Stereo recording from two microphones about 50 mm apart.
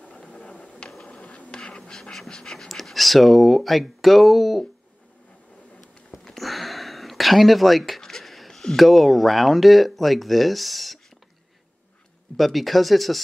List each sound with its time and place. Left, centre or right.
0.1 s a sound: centre
0.8 s printer: centre
1.2 s printer: centre
1.9 s speech: centre
6.2 s speech: centre
12.4 s speech: centre